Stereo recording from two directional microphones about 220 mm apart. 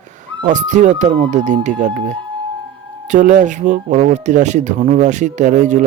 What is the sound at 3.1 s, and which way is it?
Speech, 35° right (ahead or behind).